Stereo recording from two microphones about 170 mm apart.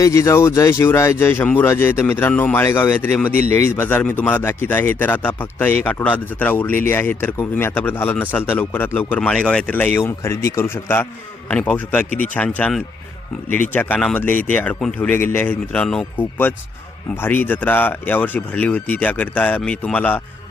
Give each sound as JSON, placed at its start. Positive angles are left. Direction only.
{"t": 0.0, "sound": "speech", "side_deg": 15}